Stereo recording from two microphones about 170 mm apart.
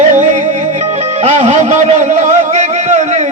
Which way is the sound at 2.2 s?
40° right (ahead or behind).